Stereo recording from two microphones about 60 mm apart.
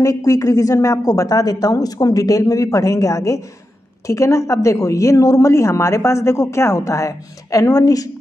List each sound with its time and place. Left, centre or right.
0.0 s a woman's voice: left